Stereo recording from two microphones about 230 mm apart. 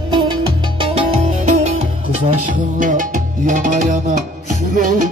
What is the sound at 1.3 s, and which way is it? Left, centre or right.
Music, right.